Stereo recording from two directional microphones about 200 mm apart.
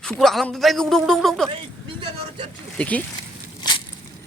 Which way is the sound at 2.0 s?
25° right (ahead or behind).